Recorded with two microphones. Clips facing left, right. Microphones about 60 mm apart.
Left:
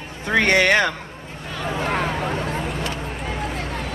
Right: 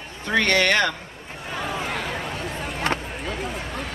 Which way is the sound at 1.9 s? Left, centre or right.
Left.